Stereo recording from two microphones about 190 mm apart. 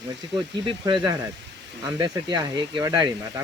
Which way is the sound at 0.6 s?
25° right (ahead or behind).